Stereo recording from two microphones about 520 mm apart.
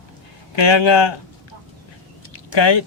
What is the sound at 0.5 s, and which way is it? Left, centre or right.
Speech, left.